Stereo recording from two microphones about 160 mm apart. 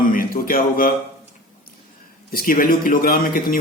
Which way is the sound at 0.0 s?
60° left (ahead or behind).